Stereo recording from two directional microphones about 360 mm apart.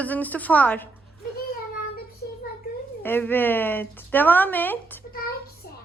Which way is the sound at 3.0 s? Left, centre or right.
Centre.